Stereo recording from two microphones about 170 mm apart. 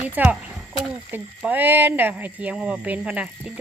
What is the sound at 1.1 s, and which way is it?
Speech, 10° right (ahead or behind).